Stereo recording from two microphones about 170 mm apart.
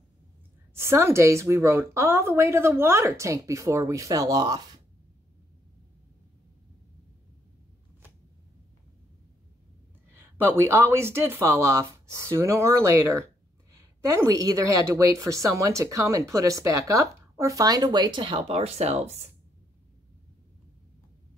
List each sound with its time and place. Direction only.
0.7 s a woman's voice: 15° right (ahead or behind)
10.2 s speech: 15° right (ahead or behind); by 19.3 s 40° right (ahead or behind)